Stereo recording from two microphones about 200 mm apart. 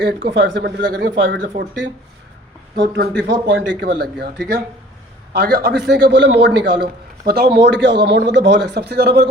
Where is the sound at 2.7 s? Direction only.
55° right (ahead or behind).